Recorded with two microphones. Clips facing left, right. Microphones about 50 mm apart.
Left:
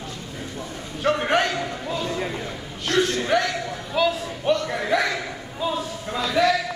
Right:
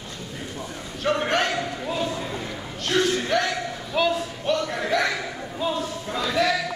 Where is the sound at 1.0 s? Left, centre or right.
Centre.